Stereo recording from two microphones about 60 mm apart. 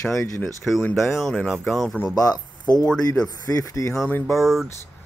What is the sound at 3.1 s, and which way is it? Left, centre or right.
Speech, left.